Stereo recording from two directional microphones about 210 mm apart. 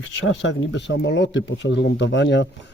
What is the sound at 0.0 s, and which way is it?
Speech, 65° left (ahead or behind).